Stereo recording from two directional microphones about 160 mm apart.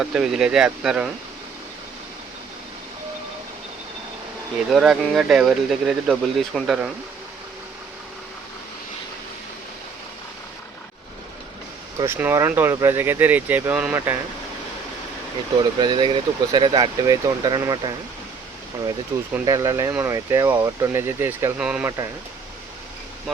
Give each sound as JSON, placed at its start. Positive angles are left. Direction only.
{"t": 0.0, "sound": "speech", "side_deg": -5}
{"t": 4.7, "sound": "speech", "side_deg": -5}
{"t": 11.9, "sound": "speech", "side_deg": -15}
{"t": 15.8, "sound": "speech", "side_deg": -30}
{"t": 19.1, "sound": "speech", "side_deg": -15}